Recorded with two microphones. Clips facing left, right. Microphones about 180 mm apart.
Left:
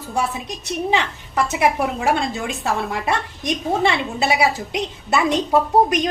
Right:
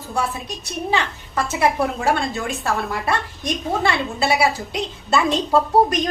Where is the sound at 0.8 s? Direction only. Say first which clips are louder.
Left 1 dB; 20° left (ahead or behind).